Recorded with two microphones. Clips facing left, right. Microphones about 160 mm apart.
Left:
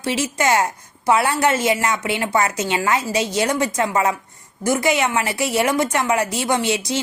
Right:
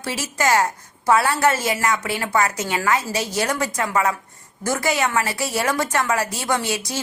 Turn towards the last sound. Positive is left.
turn(degrees=20)  # may be behind; listen again after turning